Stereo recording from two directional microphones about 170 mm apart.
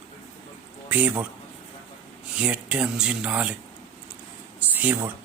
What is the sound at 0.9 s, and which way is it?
Speech, 10° right (ahead or behind).